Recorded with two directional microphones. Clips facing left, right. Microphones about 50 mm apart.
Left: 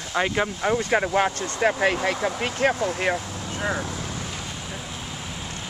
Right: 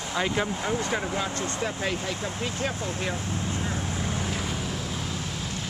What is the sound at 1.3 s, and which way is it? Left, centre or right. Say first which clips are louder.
Speech: even; right.